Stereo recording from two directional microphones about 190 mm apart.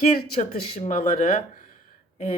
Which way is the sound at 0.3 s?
40° left (ahead or behind).